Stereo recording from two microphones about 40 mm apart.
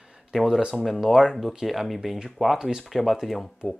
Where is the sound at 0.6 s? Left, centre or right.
Right.